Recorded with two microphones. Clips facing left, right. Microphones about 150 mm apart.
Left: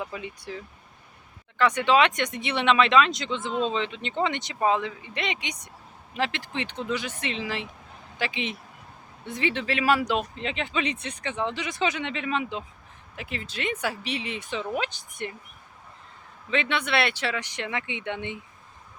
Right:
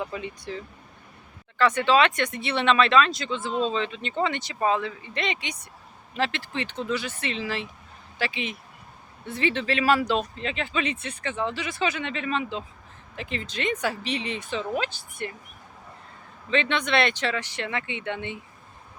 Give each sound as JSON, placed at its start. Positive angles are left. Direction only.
{"t": 0.0, "sound": "speech", "side_deg": 5}
{"t": 16.5, "sound": "speech", "side_deg": 10}